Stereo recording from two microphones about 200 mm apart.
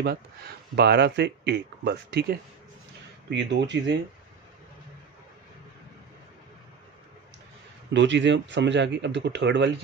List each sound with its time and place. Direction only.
0.0 s speech: 55° right (ahead or behind)
7.9 s speech: 65° right (ahead or behind)